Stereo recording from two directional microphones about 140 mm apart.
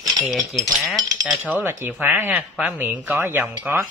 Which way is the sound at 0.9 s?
25° right (ahead or behind).